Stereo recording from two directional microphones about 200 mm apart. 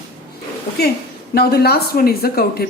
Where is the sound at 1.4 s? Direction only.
50° left (ahead or behind).